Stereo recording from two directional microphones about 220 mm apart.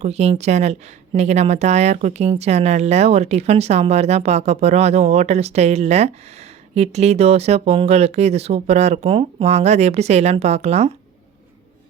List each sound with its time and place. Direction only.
0.0 s a woman's voice: 30° right (ahead or behind)